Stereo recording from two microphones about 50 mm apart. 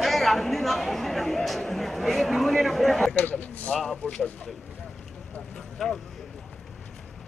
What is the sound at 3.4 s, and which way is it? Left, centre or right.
Speech, left.